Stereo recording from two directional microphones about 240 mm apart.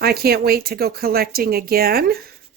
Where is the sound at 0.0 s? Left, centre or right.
Right.